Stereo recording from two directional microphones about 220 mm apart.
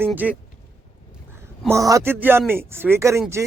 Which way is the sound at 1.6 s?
15° right (ahead or behind).